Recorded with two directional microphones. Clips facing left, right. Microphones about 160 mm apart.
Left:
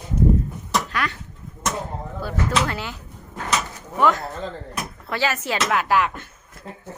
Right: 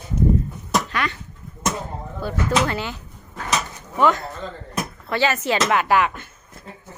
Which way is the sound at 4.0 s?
Centre (ahead or behind).